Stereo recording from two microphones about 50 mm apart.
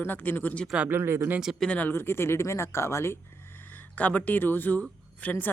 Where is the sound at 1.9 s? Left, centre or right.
Left.